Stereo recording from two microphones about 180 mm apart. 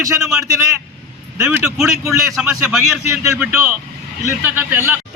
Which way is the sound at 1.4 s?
10° right (ahead or behind).